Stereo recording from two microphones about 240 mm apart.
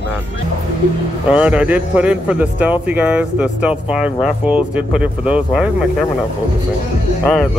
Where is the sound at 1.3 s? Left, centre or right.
Centre.